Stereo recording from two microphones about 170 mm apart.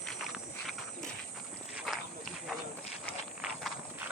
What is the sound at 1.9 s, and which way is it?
Walk, 5° left (ahead or behind).